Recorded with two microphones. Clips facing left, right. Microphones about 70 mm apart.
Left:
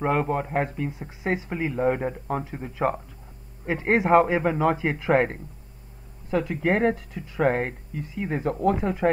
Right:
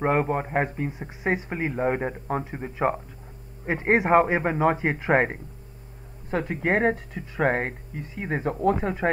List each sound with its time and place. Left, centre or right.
0.0 s speech: right